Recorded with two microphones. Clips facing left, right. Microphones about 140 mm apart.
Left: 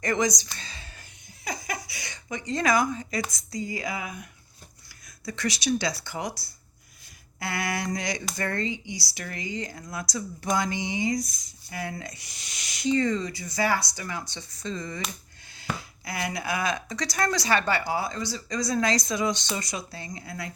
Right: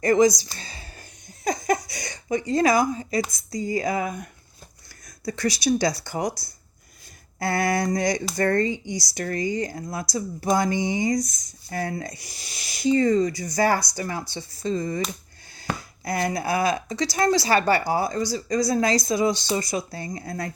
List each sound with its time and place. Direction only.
0.0 s a woman's voice: 30° right (ahead or behind)
0.4 s a sound: 35° right (ahead or behind)
1.5 s a woman's voice: 45° right (ahead or behind)
7.3 s a woman's voice: 40° right (ahead or behind)
17.6 s a woman's voice: 40° right (ahead or behind)